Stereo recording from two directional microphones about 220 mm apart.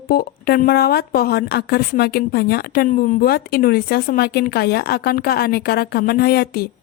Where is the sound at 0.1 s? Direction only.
45° left (ahead or behind).